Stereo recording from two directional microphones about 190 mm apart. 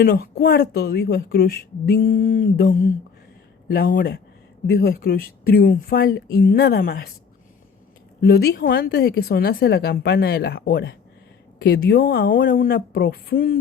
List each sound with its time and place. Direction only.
0.0 s speech: 55° left (ahead or behind)
8.2 s speech: 60° left (ahead or behind)